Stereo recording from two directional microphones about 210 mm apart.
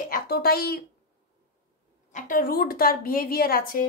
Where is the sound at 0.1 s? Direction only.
45° left (ahead or behind).